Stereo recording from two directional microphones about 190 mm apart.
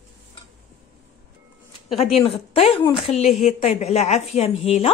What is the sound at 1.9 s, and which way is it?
A woman's voice, 30° left (ahead or behind).